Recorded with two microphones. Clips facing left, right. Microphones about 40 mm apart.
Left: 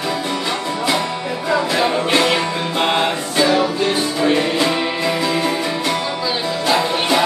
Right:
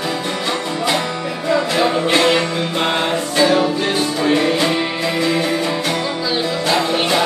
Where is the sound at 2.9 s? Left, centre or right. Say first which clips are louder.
Even; centre.